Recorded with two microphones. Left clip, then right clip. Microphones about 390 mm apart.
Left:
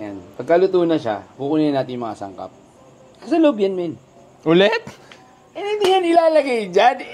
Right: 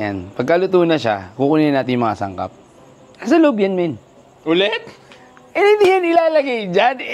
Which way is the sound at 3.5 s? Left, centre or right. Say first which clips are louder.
Right 3 dB; right.